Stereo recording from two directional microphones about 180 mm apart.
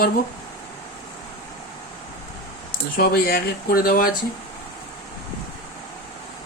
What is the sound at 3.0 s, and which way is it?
Speech, 55° left (ahead or behind).